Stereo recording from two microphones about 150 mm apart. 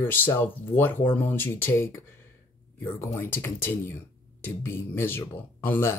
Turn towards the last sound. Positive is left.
turn(degrees=15)  # may be behind; listen again after turning